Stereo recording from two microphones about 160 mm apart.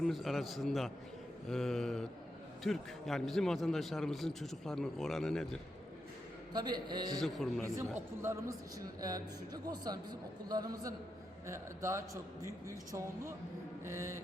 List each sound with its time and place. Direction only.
0.0 s a man's voice: centre (ahead or behind)
6.5 s a man's voice: 25° right (ahead or behind)
7.2 s a man's voice: centre (ahead or behind)
8.2 s a man's voice: 20° right (ahead or behind)